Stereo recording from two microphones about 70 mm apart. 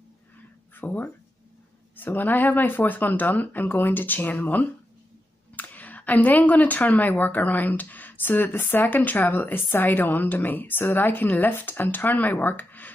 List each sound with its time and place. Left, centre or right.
0.7 s speech: left